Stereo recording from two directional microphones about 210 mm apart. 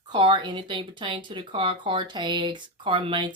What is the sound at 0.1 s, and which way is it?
Speech, 25° right (ahead or behind).